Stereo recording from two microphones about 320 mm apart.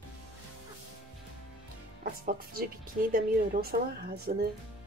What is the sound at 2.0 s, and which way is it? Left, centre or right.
Speech, right.